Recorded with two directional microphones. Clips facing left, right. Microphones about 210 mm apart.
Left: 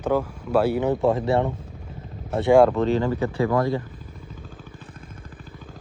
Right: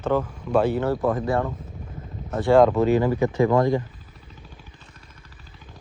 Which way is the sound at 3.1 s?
15° right (ahead or behind).